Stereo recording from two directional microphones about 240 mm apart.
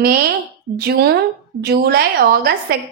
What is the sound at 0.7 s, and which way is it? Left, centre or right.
A woman's voice, right.